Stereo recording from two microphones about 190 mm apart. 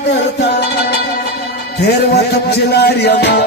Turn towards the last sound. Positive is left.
turn(degrees=60)  # may be behind; listen again after turning